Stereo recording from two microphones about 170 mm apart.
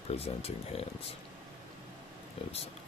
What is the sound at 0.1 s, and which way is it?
Speech, 35° left (ahead or behind).